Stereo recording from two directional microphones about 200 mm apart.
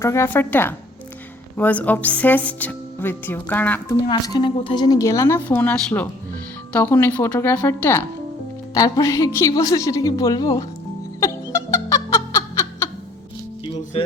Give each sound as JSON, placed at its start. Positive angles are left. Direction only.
{"t": 0.0, "sound": "speech", "side_deg": 15}
{"t": 4.0, "sound": "speech", "side_deg": 25}
{"t": 11.2, "sound": "giggle", "side_deg": 15}